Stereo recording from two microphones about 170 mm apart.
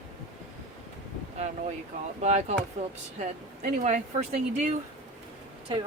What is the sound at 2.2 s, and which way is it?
Speech, 40° right (ahead or behind).